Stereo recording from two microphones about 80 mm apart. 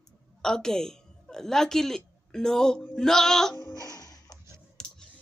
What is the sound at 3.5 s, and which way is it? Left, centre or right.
Babbling, left.